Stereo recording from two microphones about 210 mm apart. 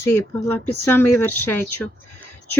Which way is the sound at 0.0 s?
10° left (ahead or behind).